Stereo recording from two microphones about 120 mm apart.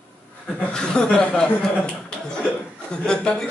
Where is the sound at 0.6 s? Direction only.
5° left (ahead or behind).